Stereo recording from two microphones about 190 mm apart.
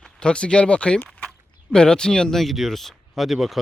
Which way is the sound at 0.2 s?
5° left (ahead or behind).